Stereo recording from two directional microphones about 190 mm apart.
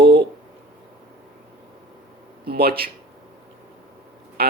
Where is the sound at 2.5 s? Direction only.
55° right (ahead or behind).